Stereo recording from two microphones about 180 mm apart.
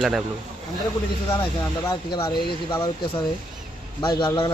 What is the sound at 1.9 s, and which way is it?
Speech, 20° left (ahead or behind).